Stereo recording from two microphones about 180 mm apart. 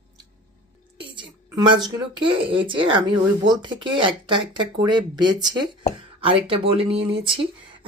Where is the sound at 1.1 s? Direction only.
25° right (ahead or behind).